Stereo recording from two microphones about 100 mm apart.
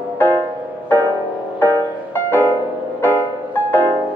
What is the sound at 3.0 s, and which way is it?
Music, 20° left (ahead or behind).